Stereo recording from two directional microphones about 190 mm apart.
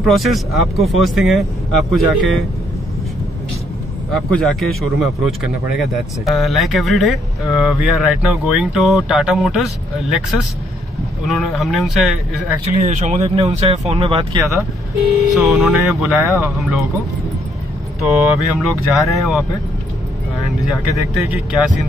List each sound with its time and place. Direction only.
0.0 s speech: centre (ahead or behind)
4.1 s speech: centre (ahead or behind)
11.2 s speech: centre (ahead or behind)
12.8 s speech: 35° right (ahead or behind)
14.4 s speech: 15° right (ahead or behind)
15.3 s speech: centre (ahead or behind)
16.2 s speech: 15° right (ahead or behind)
18.0 s speech: centre (ahead or behind)
20.9 s speech: 5° right (ahead or behind)